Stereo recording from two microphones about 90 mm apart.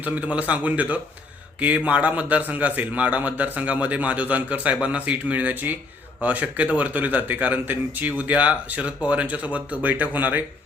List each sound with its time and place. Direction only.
0.0 s a man's voice: 15° right (ahead or behind)